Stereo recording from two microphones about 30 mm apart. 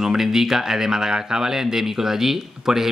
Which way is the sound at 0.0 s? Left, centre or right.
Centre.